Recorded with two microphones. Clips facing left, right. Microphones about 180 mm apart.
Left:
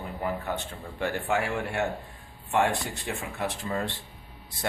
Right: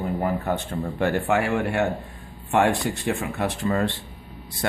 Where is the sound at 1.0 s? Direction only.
60° right (ahead or behind).